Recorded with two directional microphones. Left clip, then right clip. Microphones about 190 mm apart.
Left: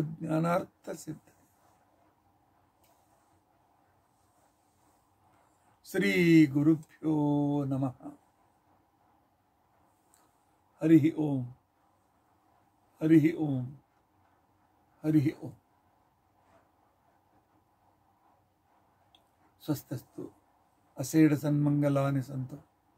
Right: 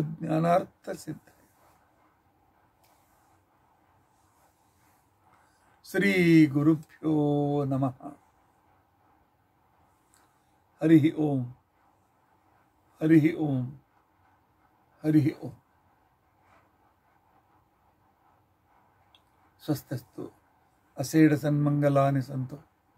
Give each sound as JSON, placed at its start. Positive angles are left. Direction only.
{"t": 0.2, "sound": "speech", "side_deg": 0}
{"t": 5.8, "sound": "speech", "side_deg": -5}
{"t": 10.8, "sound": "speech", "side_deg": -5}
{"t": 13.0, "sound": "speech", "side_deg": -5}
{"t": 15.0, "sound": "a man's voice", "side_deg": -5}
{"t": 19.6, "sound": "speech", "side_deg": -5}